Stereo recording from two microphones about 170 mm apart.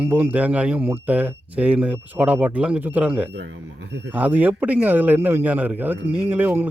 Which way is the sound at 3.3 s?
90° right.